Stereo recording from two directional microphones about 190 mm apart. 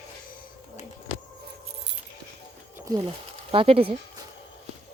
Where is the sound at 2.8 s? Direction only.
25° right (ahead or behind).